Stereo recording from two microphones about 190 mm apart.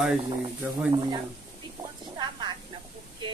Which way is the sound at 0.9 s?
25° right (ahead or behind).